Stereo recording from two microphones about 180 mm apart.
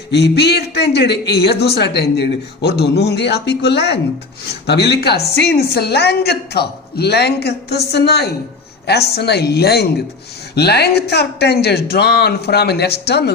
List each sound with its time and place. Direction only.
0.1 s a woman's voice: 65° left (ahead or behind)